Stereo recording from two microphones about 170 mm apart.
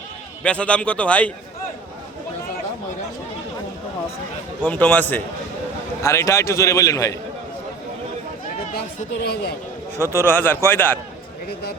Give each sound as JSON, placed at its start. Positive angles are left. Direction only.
{"t": 0.4, "sound": "a man's voice", "side_deg": 5}
{"t": 4.6, "sound": "a man's voice", "side_deg": 10}
{"t": 9.2, "sound": "a man's voice", "side_deg": 70}
{"t": 10.0, "sound": "a man's voice", "side_deg": -15}
{"t": 10.5, "sound": "a man's voice", "side_deg": 10}